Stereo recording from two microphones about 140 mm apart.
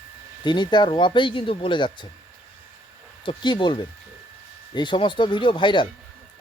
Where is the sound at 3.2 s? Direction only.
35° left (ahead or behind).